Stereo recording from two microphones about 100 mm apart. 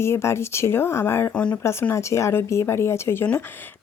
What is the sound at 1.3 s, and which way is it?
Speech, 10° left (ahead or behind).